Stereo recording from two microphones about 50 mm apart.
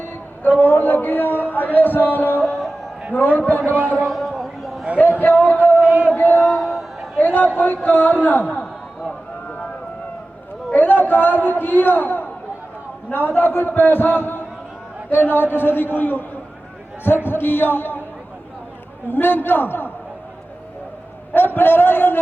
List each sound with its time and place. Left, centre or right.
0.0 s a sound: left
0.6 s speech: left
3.7 s speech: right
4.0 s a sound: centre
5.2 s speech: left
5.8 s chant: right
6.1 s speech: left
6.6 s a sound: centre
7.2 s speech: left
10.7 s a man's voice: left
17.2 s a man's voice: left
19.0 s a man's voice: left
21.3 s a man's voice: left